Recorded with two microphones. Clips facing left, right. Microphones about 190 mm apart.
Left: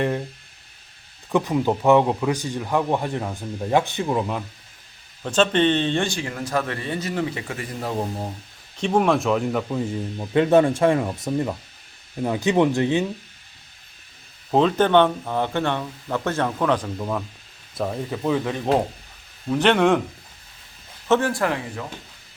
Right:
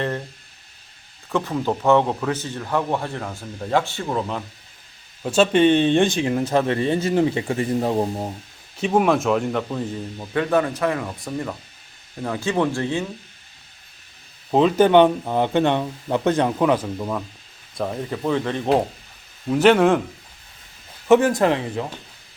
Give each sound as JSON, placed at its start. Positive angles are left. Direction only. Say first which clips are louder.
{"t": 1.3, "sound": "speech", "louder": "left 2 dB", "side_deg": 15}
{"t": 5.2, "sound": "speech", "louder": "right 3 dB", "side_deg": -10}
{"t": 8.8, "sound": "speech", "louder": "right 1 dB", "side_deg": -5}
{"t": 10.3, "sound": "speech", "louder": "left 4 dB", "side_deg": 25}
{"t": 14.5, "sound": "speech", "louder": "right 3 dB", "side_deg": -5}
{"t": 21.1, "sound": "speech", "louder": "right 5 dB", "side_deg": -20}